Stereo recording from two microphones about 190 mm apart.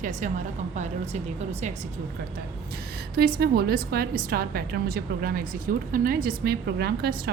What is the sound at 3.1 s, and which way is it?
A woman's voice, 55° right (ahead or behind).